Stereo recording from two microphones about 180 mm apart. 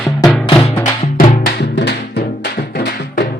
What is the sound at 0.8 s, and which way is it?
Music, 45° left (ahead or behind).